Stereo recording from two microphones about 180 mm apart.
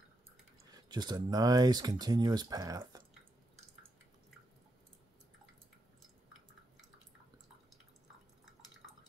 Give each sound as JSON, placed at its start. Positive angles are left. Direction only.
{"t": 0.7, "sound": "speech", "side_deg": -25}